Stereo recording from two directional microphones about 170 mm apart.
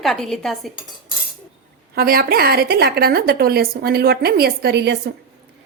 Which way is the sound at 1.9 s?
60° right (ahead or behind).